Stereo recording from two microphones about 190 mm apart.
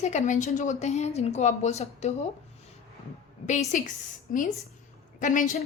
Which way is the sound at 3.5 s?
40° left (ahead or behind).